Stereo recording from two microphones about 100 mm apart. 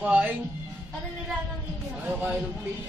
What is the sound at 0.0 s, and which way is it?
Speech, 15° right (ahead or behind).